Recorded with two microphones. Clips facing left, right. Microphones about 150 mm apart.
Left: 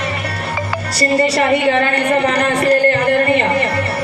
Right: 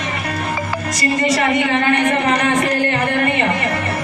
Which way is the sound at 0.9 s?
35° left (ahead or behind).